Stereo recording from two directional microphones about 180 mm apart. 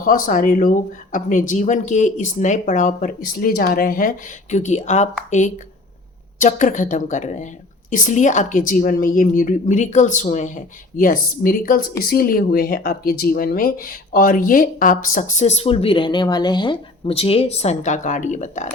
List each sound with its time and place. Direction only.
0.0 s a woman's voice: 50° left (ahead or behind)
4.5 s speech: 40° left (ahead or behind)
6.4 s a woman's voice: 45° left (ahead or behind)